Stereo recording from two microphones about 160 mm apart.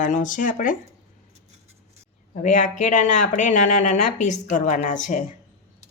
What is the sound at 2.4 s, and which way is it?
Speech, 50° left (ahead or behind).